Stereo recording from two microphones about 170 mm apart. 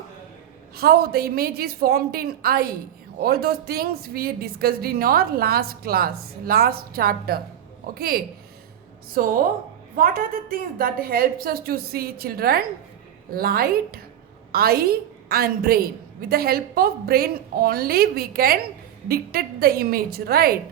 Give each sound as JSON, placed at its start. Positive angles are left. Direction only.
{"t": 0.8, "sound": "speech", "side_deg": -65}